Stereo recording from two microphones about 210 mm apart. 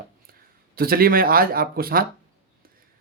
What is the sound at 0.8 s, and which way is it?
Speech, 45° right (ahead or behind).